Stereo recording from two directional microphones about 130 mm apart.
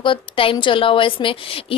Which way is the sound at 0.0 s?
40° left (ahead or behind).